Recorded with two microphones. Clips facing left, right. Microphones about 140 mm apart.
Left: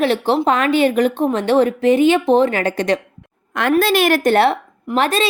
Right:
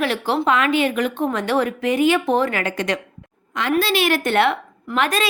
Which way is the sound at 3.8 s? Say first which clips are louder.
Left 4 dB; 45° left (ahead or behind).